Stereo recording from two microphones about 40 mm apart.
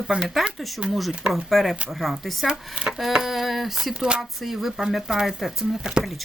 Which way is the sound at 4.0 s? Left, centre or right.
Right.